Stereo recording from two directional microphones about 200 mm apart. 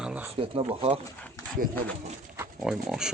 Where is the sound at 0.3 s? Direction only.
30° right (ahead or behind).